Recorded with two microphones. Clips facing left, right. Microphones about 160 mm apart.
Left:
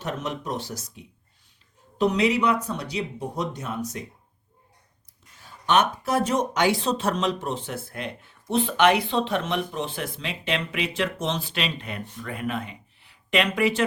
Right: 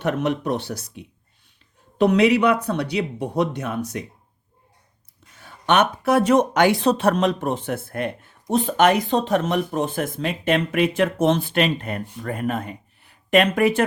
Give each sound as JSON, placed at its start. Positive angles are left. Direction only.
{"t": 0.0, "sound": "speech", "side_deg": -65}
{"t": 5.4, "sound": "speech", "side_deg": -65}